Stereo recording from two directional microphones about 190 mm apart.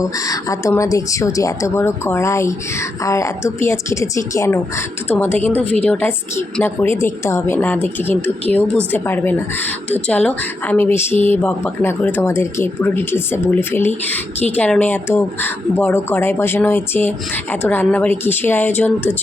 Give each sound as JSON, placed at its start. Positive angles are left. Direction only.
{"t": 0.0, "sound": "speech", "side_deg": 15}